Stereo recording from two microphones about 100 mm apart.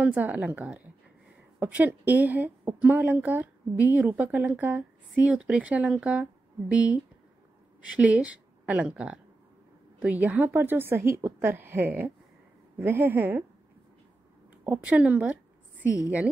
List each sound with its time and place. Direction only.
0.0 s a woman's voice: 15° right (ahead or behind)
14.6 s a woman's voice: 15° right (ahead or behind)